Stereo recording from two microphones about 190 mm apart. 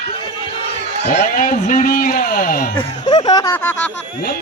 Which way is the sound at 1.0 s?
40° left (ahead or behind).